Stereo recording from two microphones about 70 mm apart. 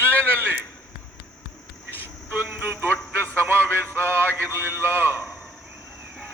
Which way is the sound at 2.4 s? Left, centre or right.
Right.